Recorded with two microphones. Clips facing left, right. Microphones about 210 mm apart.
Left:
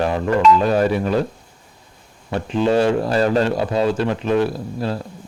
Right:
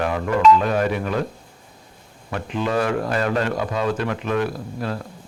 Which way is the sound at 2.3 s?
30° left (ahead or behind).